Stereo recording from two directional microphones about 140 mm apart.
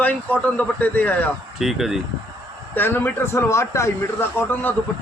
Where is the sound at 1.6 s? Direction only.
5° right (ahead or behind).